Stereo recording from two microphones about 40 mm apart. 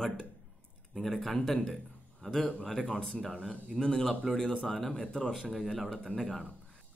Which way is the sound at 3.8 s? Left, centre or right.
Centre.